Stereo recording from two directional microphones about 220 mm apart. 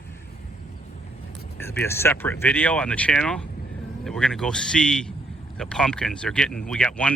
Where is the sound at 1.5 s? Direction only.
10° left (ahead or behind).